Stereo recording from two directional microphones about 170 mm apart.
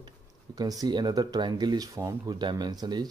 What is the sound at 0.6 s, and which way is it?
Speech, 20° right (ahead or behind).